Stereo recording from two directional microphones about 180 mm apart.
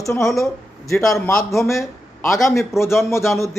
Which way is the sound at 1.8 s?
15° left (ahead or behind).